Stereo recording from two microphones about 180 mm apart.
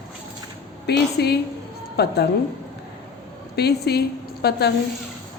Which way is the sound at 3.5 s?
65° left (ahead or behind).